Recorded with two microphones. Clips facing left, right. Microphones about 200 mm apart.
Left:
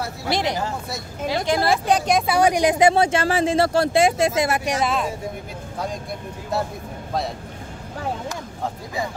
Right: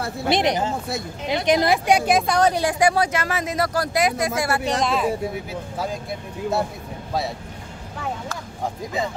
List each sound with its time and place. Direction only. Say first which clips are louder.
0.3 s speech: right 3 dB; 20° right (ahead or behind)
2.2 s speech: left 2 dB; 10° left (ahead or behind)
4.7 s speech: right 1 dB; centre (ahead or behind)